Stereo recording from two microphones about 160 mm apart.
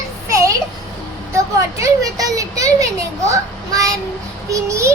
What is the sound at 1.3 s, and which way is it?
A child's voice, 20° right (ahead or behind).